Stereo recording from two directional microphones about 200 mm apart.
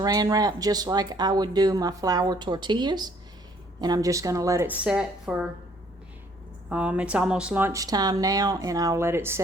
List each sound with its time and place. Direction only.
0.0 s speech: 20° right (ahead or behind)
6.7 s speech: 5° right (ahead or behind)